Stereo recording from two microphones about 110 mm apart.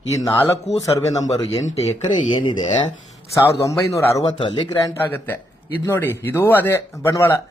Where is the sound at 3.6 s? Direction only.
25° left (ahead or behind).